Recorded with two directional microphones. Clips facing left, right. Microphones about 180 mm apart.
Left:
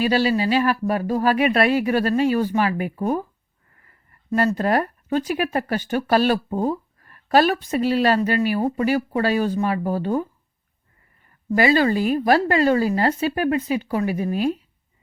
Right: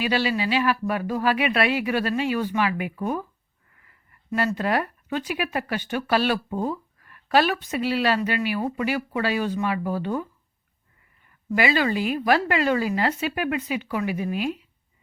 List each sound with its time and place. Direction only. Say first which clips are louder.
0.0 s speech: left 5 dB; 40° left (ahead or behind)
11.5 s speech: left 5 dB; 40° left (ahead or behind)